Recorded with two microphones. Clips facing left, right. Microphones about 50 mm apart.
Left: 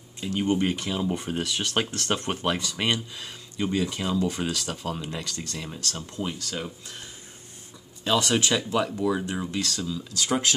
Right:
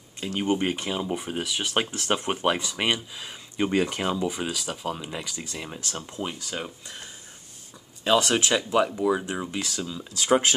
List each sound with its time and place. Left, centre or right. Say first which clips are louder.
0.2 s speech: left 1 dB; right
0.5 s speech: even; centre
1.0 s speech: left 1 dB; centre
3.5 s speech: right 3 dB; right
4.3 s speech: left 1 dB; centre
8.0 s speech: right 2 dB; centre